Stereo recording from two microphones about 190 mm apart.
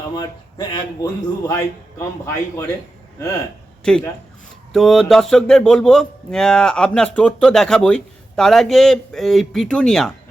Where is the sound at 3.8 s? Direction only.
5° left (ahead or behind).